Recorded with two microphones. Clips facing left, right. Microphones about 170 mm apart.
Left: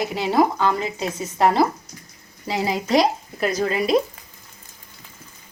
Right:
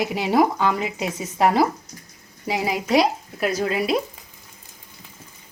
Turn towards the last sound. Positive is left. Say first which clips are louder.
# left 1 dB
turn(degrees=-5)  # may be behind; listen again after turning